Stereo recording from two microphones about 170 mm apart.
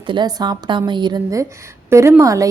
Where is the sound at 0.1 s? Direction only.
25° right (ahead or behind).